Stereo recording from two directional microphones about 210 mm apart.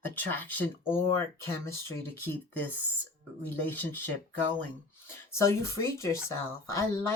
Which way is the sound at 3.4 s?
10° left (ahead or behind).